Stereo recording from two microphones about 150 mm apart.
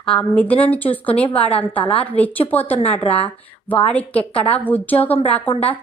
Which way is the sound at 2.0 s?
10° left (ahead or behind).